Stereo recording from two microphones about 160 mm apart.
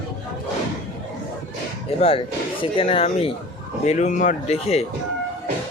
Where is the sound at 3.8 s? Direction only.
50° left (ahead or behind).